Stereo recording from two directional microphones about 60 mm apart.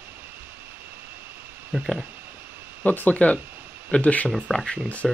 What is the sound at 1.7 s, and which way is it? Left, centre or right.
Speech, right.